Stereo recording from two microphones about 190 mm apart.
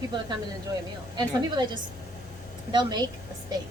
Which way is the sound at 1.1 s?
25° right (ahead or behind).